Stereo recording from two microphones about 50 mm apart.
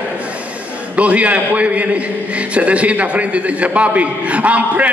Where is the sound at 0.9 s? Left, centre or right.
Right.